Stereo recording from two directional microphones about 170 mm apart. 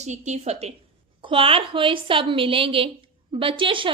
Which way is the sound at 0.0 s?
45° right (ahead or behind).